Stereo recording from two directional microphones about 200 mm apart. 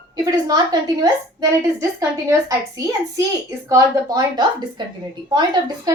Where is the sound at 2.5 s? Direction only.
15° right (ahead or behind).